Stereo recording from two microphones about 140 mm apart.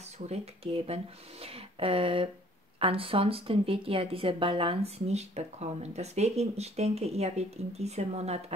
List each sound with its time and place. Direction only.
0.3 s speech: 45° right (ahead or behind)